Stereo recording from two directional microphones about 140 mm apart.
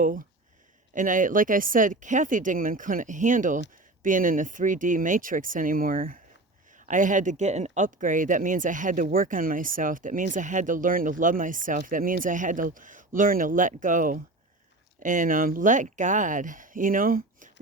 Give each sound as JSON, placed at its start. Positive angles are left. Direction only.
{"t": 0.0, "sound": "speech", "side_deg": -75}
{"t": 6.7, "sound": "speech", "side_deg": -65}